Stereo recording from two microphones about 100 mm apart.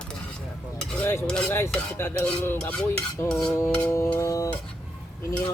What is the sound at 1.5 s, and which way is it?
Cutlery, 25° left (ahead or behind).